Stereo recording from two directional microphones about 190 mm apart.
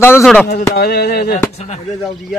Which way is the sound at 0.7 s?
55° left (ahead or behind).